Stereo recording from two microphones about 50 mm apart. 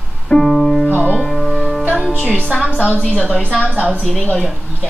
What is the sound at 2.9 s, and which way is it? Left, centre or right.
Speech, left.